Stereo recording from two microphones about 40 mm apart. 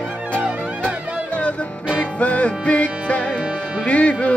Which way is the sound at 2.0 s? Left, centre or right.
Left.